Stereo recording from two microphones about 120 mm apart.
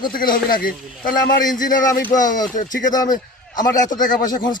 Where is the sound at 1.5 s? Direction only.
90° left.